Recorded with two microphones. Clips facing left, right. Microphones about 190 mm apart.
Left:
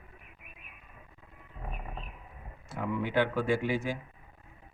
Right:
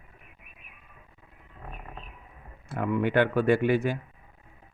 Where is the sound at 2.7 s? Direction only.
60° right (ahead or behind).